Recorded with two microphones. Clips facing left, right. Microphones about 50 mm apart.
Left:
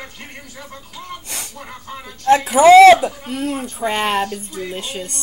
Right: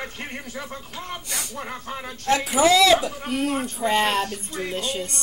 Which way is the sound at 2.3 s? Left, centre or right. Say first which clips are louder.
Left 9 dB; left.